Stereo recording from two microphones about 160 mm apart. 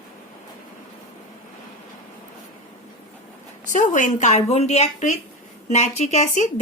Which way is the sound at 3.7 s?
55° left (ahead or behind).